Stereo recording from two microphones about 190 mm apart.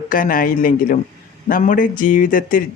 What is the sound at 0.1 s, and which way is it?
Speech, 45° left (ahead or behind).